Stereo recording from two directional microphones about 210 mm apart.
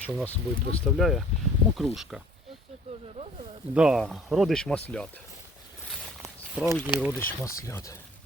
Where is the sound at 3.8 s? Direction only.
5° right (ahead or behind).